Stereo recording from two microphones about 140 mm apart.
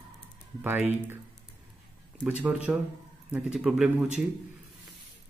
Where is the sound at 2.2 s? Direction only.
10° right (ahead or behind).